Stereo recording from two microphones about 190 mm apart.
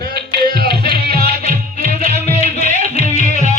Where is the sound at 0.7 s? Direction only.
30° left (ahead or behind).